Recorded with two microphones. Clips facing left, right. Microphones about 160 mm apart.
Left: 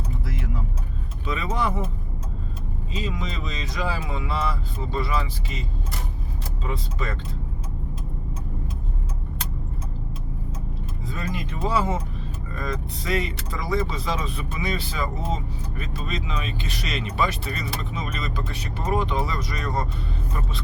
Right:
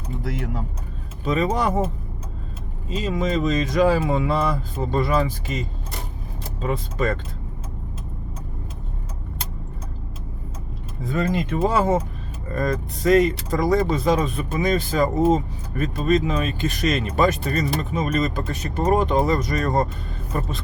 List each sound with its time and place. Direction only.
1.2 s speech: 40° right (ahead or behind)
2.9 s speech: 45° right (ahead or behind)
11.0 s speech: 55° right (ahead or behind)